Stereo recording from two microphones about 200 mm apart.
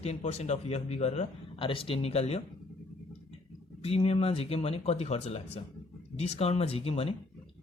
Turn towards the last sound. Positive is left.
turn(degrees=30)  # may be behind; listen again after turning